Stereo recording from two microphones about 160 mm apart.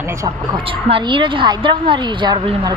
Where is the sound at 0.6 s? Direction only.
35° right (ahead or behind).